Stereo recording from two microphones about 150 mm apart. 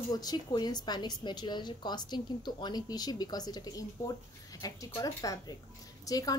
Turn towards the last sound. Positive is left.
turn(degrees=25)  # may be behind; listen again after turning